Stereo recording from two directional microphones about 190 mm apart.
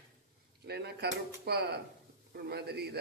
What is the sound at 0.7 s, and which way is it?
A man's voice, 60° right (ahead or behind).